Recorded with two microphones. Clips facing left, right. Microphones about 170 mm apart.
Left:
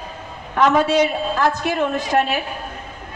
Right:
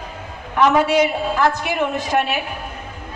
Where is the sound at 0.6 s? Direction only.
15° right (ahead or behind).